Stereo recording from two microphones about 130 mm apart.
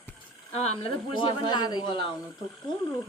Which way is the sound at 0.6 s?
40° left (ahead or behind).